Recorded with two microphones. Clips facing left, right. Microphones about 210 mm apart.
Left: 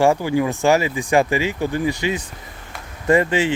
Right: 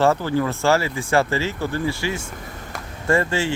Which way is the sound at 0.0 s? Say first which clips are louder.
Left 2 dB; 15° left (ahead or behind).